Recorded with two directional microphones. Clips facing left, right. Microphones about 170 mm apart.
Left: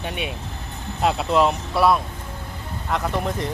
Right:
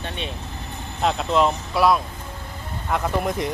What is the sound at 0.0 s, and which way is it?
Speech, 10° left (ahead or behind).